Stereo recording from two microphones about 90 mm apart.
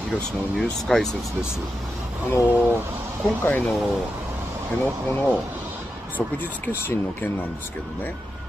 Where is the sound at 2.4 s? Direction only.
15° right (ahead or behind).